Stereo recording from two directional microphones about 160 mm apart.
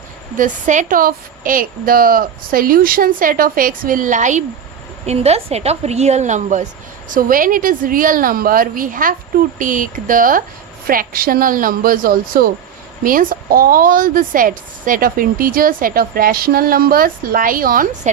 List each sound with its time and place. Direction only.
0.3 s a woman's voice: 50° right (ahead or behind)
7.1 s a woman's voice: 60° right (ahead or behind)